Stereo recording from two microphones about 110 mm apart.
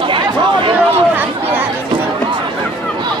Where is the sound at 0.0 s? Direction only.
50° right (ahead or behind).